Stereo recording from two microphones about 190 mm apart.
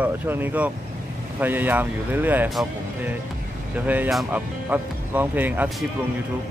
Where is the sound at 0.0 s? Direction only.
10° right (ahead or behind).